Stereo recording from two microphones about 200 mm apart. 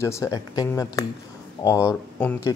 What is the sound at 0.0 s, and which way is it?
Speech, 15° left (ahead or behind).